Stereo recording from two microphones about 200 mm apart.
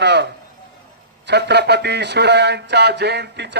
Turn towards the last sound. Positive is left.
turn(degrees=-55)  # may be behind; listen again after turning